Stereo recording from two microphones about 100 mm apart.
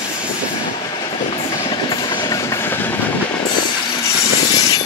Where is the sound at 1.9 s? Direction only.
45° left (ahead or behind).